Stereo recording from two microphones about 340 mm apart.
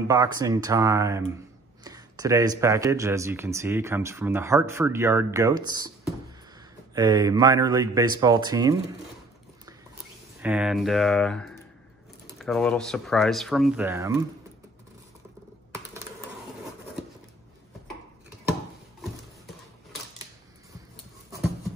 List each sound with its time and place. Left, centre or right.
0.1 s speech: centre
7.0 s speech: centre
10.4 s speech: centre
18.5 s a sound: centre